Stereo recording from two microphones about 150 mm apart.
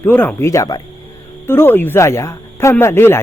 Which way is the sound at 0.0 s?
10° left (ahead or behind).